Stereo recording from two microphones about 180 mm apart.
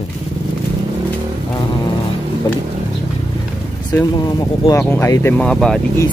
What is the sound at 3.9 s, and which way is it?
Speech, 20° left (ahead or behind).